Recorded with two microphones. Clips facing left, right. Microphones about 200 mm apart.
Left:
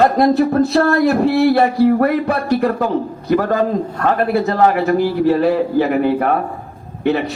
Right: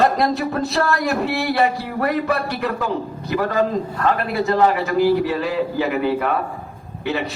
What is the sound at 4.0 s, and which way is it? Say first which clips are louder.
A man's voice: left 5 dB; 45° left (ahead or behind).